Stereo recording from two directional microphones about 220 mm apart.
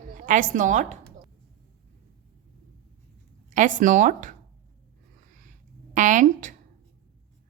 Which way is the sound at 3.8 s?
35° right (ahead or behind).